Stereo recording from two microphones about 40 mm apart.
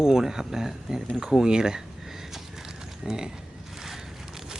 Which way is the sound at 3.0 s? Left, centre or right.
Centre.